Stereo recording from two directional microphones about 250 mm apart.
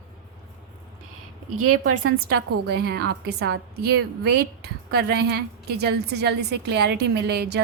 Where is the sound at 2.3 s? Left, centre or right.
Right.